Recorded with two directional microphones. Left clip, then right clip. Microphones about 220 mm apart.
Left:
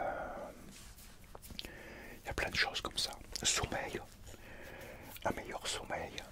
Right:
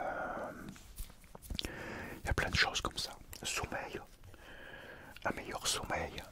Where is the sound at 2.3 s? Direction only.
30° right (ahead or behind).